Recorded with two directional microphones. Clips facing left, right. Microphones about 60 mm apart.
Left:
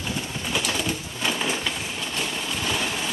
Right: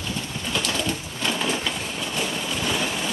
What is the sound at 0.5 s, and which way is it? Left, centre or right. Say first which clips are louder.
Bird: right 1 dB; centre.